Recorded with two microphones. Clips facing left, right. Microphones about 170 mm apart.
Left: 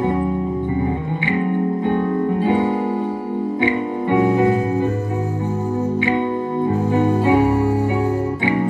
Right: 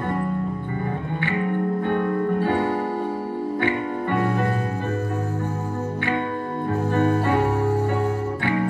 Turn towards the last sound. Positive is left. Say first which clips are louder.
# left 6 dB
turn(degrees=15)  # may be behind; listen again after turning